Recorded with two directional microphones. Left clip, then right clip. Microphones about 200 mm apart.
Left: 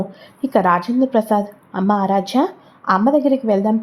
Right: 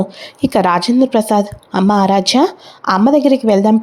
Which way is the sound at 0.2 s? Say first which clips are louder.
Right 2 dB; 30° right (ahead or behind).